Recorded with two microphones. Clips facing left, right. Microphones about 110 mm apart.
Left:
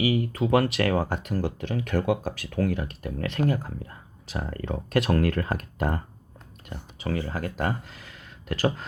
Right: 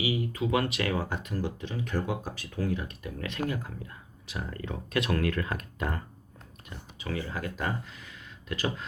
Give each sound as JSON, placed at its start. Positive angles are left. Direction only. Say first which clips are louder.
{"t": 0.0, "sound": "speech", "louder": "left 5 dB", "side_deg": 50}